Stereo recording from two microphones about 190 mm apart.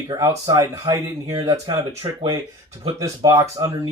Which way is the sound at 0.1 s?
20° right (ahead or behind).